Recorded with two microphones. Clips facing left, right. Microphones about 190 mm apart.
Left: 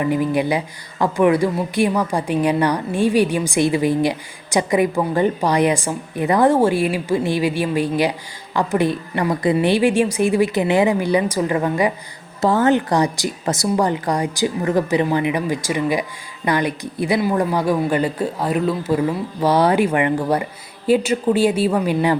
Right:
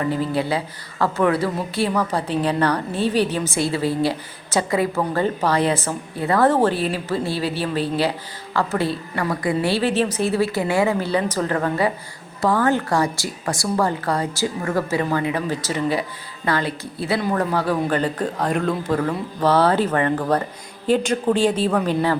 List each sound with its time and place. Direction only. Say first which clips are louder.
0.0 s a woman's voice: left 3 dB; 15° left (ahead or behind)